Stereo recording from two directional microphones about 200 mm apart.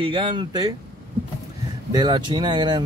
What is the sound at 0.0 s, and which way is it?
Speech, 25° right (ahead or behind).